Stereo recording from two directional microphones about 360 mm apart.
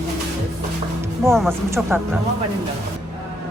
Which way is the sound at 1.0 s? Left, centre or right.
Centre.